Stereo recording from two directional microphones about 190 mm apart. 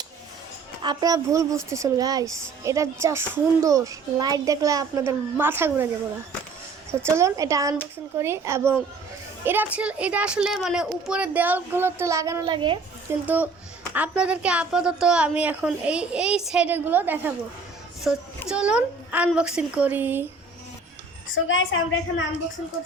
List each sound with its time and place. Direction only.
0.8 s a child's voice: 20° right (ahead or behind)
7.0 s a child's voice: 15° right (ahead or behind)
13.2 s a child's voice: 10° right (ahead or behind)
21.3 s a woman's voice: 90° left